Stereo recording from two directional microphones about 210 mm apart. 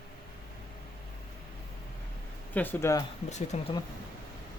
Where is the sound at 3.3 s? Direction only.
35° left (ahead or behind).